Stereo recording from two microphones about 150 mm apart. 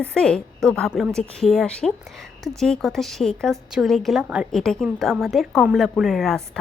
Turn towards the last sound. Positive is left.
turn(degrees=5)  # may be behind; listen again after turning